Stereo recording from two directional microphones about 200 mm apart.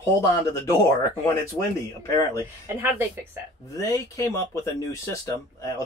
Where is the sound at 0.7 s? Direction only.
15° left (ahead or behind).